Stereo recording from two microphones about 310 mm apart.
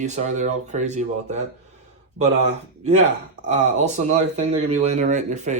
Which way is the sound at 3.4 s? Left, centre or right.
Right.